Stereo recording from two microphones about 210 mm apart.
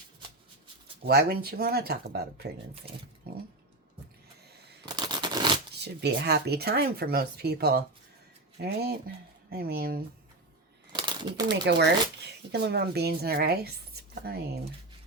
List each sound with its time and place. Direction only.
1.0 s speech: 45° right (ahead or behind)
2.8 s speech: 25° right (ahead or behind)
3.3 s speech: 50° right (ahead or behind)
4.9 s a sound: 20° right (ahead or behind)
5.8 s speech: 50° right (ahead or behind)
10.9 s bird: 20° right (ahead or behind)
11.6 s speech: 55° right (ahead or behind)